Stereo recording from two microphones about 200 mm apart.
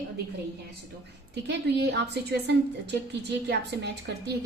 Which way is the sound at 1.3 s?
55° right (ahead or behind).